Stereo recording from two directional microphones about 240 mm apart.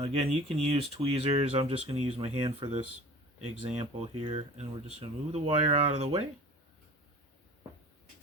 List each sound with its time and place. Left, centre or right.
0.0 s speech: right